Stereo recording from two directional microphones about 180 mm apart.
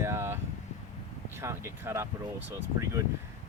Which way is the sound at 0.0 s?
15° right (ahead or behind).